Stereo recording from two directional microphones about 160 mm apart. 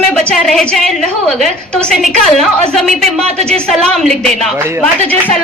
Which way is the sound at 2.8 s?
40° right (ahead or behind).